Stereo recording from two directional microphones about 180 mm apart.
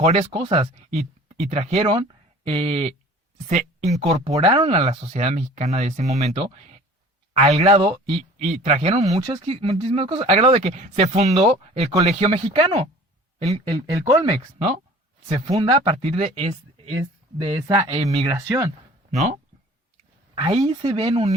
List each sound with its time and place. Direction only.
0.0 s speech: 35° right (ahead or behind)
4.0 s speech: 35° right (ahead or behind)
9.0 s speech: 20° right (ahead or behind)
13.9 s speech: 15° right (ahead or behind)
14.3 s speech: 30° right (ahead or behind)
17.9 s speech: 35° right (ahead or behind)
18.3 s speech: 15° right (ahead or behind)
19.1 s speech: 45° right (ahead or behind)
20.4 s speech: 30° right (ahead or behind)